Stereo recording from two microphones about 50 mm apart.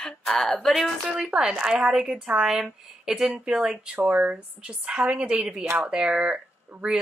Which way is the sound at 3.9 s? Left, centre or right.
Right.